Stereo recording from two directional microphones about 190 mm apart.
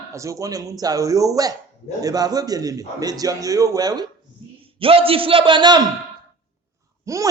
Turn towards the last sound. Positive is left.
turn(degrees=-15)  # may be behind; listen again after turning